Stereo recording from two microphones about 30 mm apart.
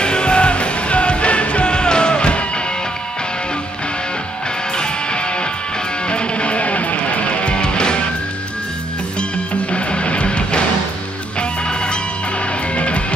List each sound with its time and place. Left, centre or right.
0.0 s music: left
4.7 s music: left
9.7 s music: left